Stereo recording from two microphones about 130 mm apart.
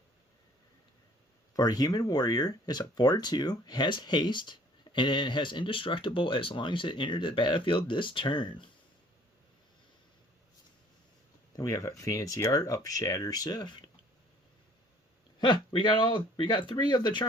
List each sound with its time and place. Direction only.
1.5 s speech: 30° left (ahead or behind)
11.5 s speech: 25° left (ahead or behind)
15.4 s speech: 35° left (ahead or behind)